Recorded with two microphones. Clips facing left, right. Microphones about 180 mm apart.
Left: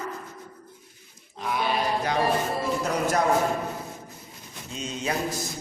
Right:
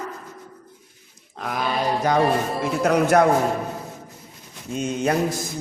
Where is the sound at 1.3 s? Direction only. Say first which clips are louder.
Right 1 dB; 50° right (ahead or behind).